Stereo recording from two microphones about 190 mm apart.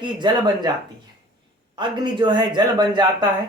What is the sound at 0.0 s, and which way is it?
Speech, 20° right (ahead or behind).